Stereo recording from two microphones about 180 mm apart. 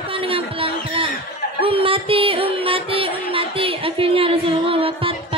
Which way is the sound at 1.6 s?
30° right (ahead or behind).